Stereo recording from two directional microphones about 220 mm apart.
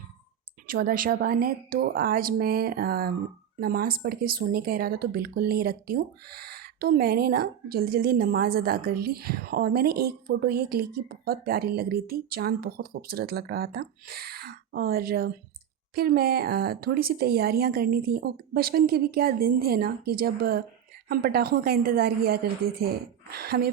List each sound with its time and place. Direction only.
0.7 s speech: 40° right (ahead or behind)